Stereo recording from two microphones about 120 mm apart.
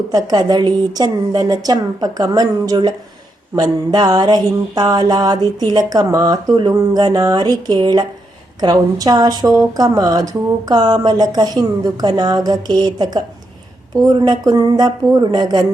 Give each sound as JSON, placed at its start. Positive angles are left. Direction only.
{"t": 0.1, "sound": "speech", "side_deg": -35}